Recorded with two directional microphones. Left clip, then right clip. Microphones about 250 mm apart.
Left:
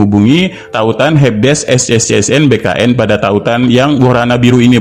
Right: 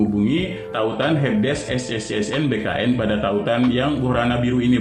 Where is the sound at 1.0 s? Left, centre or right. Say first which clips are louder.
Left 10 dB; left.